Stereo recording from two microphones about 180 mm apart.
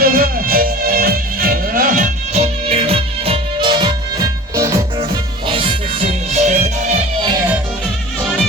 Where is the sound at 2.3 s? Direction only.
35° right (ahead or behind); by 4.8 s 20° right (ahead or behind).